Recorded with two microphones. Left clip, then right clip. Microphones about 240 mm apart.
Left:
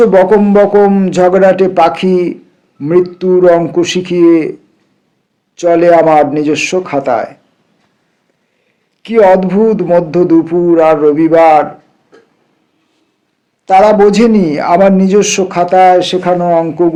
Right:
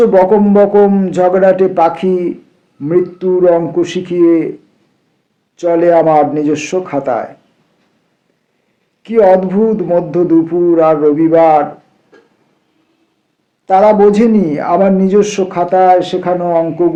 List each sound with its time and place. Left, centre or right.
0.0 s a man's voice: left
5.5 s a man's voice: left
9.0 s a man's voice: left
13.7 s a man's voice: left